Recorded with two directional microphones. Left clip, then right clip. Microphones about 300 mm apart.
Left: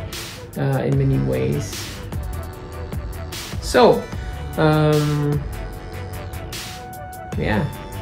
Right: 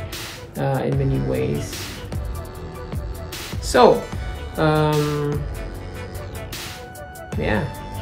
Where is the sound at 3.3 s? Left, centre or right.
Centre.